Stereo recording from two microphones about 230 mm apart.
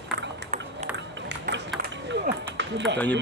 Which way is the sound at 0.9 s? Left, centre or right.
Right.